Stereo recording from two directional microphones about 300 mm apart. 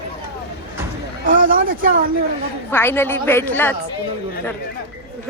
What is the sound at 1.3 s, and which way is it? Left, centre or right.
Speech, right.